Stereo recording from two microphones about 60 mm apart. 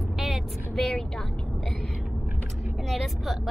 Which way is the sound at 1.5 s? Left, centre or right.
Centre.